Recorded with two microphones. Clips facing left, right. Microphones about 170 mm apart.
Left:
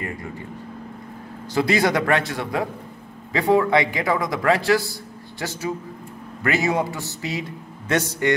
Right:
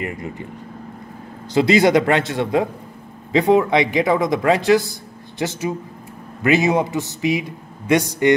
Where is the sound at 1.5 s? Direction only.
20° right (ahead or behind).